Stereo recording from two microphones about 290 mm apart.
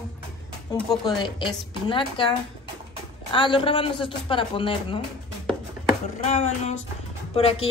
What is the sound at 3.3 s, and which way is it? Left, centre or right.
Speech, centre.